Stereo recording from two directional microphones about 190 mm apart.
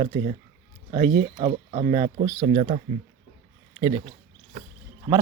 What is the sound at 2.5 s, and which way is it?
Speech, 35° right (ahead or behind).